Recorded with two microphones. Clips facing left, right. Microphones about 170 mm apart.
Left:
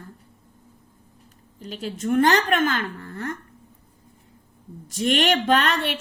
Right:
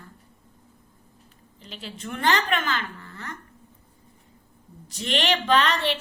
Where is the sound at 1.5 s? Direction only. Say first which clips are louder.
Left 8 dB; 45° left (ahead or behind).